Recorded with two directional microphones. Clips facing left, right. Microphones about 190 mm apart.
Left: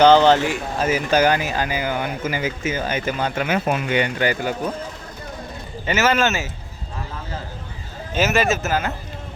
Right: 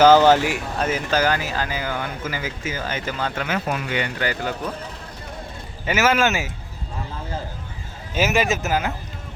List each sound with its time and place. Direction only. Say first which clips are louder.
0.0 s speech: even; 10° right (ahead or behind)
0.8 s speech: left 4 dB; 10° left (ahead or behind)
5.8 s speech: even; 10° right (ahead or behind)
8.1 s speech: left 1 dB; 10° right (ahead or behind)